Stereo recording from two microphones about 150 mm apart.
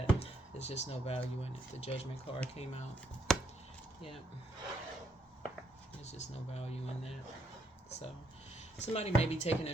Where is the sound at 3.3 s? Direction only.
5° left (ahead or behind).